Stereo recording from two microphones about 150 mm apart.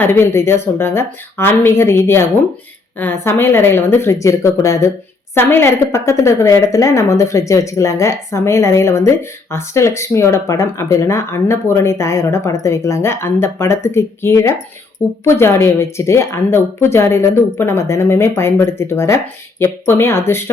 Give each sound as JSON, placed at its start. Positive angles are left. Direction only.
{"t": 0.0, "sound": "a woman's voice", "side_deg": 15}